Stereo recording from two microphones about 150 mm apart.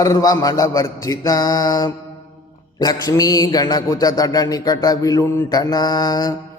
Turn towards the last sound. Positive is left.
turn(degrees=25)  # may be behind; listen again after turning